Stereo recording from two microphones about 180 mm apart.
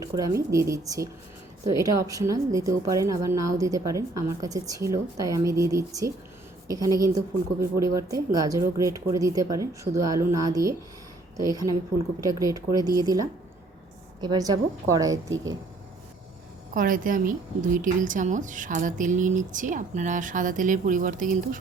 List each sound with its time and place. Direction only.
0.0 s a woman's voice: 20° right (ahead or behind)
16.7 s a woman's voice: 50° right (ahead or behind)